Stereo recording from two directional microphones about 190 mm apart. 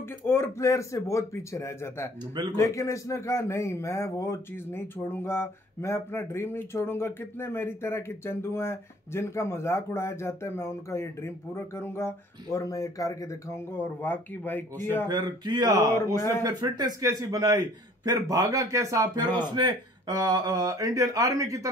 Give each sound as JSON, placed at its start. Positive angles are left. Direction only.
{"t": 0.3, "sound": "a man's voice", "side_deg": 15}
{"t": 15.0, "sound": "speech", "side_deg": -20}
{"t": 16.2, "sound": "a man's voice", "side_deg": 15}
{"t": 16.4, "sound": "a man's voice", "side_deg": -20}